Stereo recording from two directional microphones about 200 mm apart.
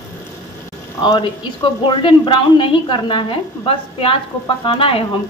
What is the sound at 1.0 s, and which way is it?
Speech, 25° left (ahead or behind).